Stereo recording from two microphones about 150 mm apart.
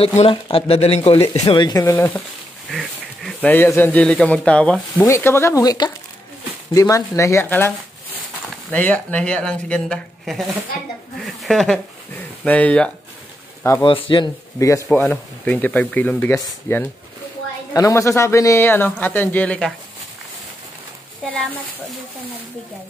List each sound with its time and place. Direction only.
0.2 s speech: 40° left (ahead or behind)
1.4 s speech: 30° left (ahead or behind); by 2.2 s 15° left (ahead or behind)
2.7 s a sound: centre (ahead or behind)
3.3 s speech: 10° left (ahead or behind)
4.9 s speech: 20° left (ahead or behind)
8.7 s speech: 10° left (ahead or behind)
13.8 s speech: 35° left (ahead or behind)
14.9 s speech: 10° left (ahead or behind)